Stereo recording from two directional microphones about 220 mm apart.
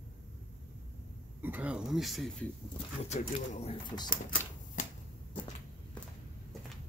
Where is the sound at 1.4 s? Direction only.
5° right (ahead or behind).